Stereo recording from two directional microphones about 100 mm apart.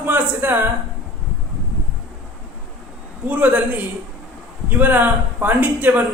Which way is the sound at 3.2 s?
15° right (ahead or behind).